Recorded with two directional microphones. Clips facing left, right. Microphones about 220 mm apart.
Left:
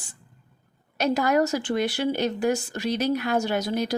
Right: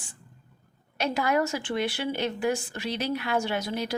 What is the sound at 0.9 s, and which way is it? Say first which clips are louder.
Speech: left 4 dB; 40° left (ahead or behind).